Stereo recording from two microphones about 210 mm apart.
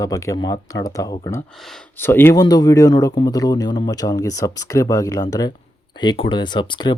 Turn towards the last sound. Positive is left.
turn(degrees=20)  # may be behind; listen again after turning